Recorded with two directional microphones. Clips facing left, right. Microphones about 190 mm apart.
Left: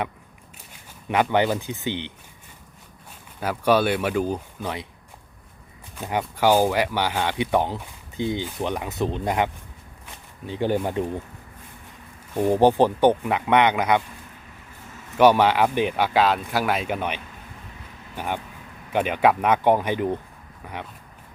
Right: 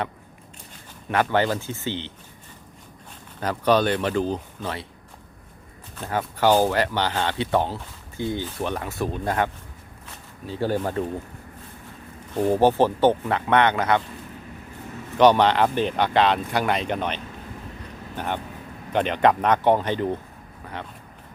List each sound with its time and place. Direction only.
1.0 s speech: 15° left (ahead or behind)
3.4 s speech: 10° left (ahead or behind)
6.0 s speech: 15° left (ahead or behind)
12.3 s speech: 15° left (ahead or behind)
15.2 s speech: 10° left (ahead or behind)
18.2 s speech: 10° left (ahead or behind)